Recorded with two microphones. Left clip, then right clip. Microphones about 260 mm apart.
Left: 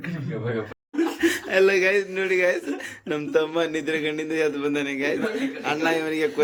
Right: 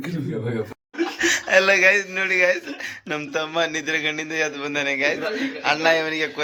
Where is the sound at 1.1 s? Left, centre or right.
Centre.